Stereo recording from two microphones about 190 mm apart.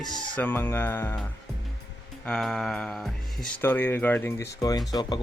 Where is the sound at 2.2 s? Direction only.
Centre (ahead or behind); by 5.2 s 20° left (ahead or behind).